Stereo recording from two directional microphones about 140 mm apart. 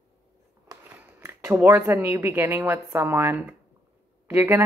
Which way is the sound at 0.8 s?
15° right (ahead or behind).